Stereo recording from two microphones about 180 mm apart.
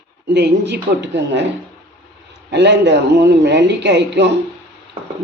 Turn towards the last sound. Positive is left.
turn(degrees=-75)  # may be behind; listen again after turning